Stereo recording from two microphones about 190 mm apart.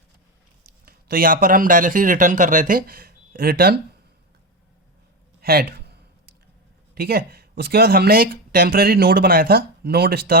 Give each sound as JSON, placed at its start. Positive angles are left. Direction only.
{"t": 0.9, "sound": "speech", "side_deg": -50}
{"t": 5.4, "sound": "a sound", "side_deg": -55}
{"t": 6.9, "sound": "speech", "side_deg": -55}